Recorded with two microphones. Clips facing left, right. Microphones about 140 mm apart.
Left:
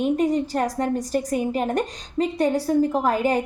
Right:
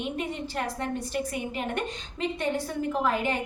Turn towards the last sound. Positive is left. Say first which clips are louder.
# left 6 dB
turn(degrees=40)  # may be behind; listen again after turning